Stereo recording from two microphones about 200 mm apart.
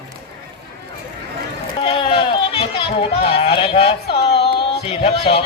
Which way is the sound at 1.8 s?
30° left (ahead or behind).